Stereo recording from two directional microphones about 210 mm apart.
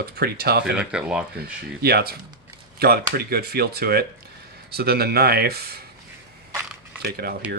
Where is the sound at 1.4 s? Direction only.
50° right (ahead or behind).